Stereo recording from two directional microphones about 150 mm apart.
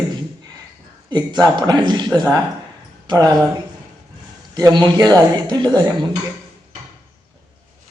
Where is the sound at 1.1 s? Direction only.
30° right (ahead or behind).